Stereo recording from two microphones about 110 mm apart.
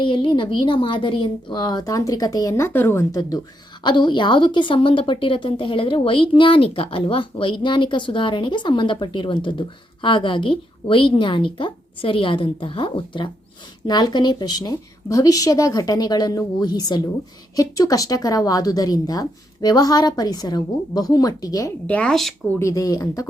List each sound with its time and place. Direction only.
0.0 s a woman's voice: 50° left (ahead or behind)
13.8 s a woman's voice: 40° left (ahead or behind)
21.8 s speech: 15° left (ahead or behind)
22.1 s speech: centre (ahead or behind)
22.5 s a woman's voice: 30° left (ahead or behind)